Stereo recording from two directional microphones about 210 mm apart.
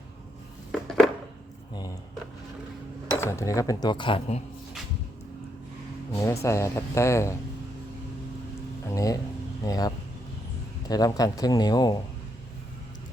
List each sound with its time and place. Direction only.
0.7 s a sound: centre (ahead or behind)
3.2 s speech: 15° left (ahead or behind)
6.1 s speech: 15° left (ahead or behind)
8.9 s a man's voice: 15° left (ahead or behind)